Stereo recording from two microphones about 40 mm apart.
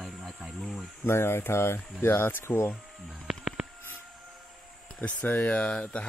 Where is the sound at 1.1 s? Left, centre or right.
Left.